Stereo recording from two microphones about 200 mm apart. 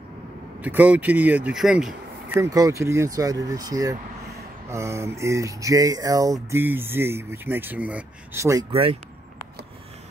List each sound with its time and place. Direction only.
0.7 s speech: 5° right (ahead or behind)
2.3 s speech: 15° right (ahead or behind)